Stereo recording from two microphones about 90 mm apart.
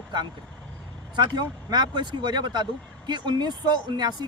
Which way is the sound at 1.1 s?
55° right (ahead or behind).